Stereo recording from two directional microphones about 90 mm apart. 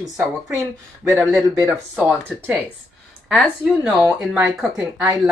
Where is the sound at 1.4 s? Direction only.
35° right (ahead or behind).